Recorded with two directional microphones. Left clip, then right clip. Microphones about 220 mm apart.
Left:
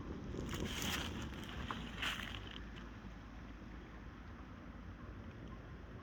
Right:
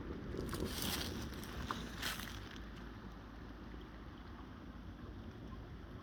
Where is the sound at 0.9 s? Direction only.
15° right (ahead or behind).